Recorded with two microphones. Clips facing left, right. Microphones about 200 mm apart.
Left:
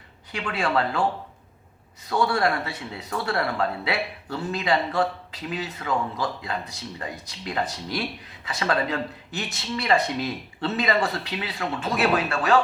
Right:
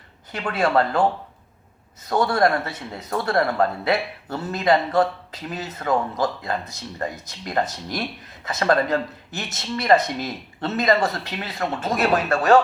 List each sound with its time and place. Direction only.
0.3 s speech: 45° right (ahead or behind)
2.0 s speech: 45° right (ahead or behind)